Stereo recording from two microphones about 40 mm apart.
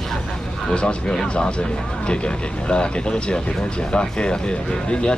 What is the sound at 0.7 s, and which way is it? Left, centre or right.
Speech, left.